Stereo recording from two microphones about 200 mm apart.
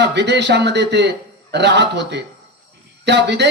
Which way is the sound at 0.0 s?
60° right (ahead or behind).